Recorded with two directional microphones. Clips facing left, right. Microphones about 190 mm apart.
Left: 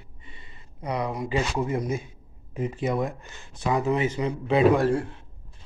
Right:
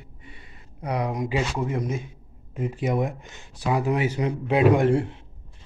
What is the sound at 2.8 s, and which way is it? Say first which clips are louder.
A man's voice: right 2 dB; 15° right (ahead or behind).